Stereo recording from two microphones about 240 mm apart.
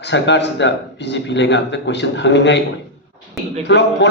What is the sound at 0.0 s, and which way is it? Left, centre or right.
Speech, left.